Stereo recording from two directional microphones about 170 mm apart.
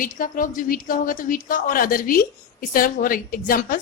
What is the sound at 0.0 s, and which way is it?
A woman's voice, 55° left (ahead or behind).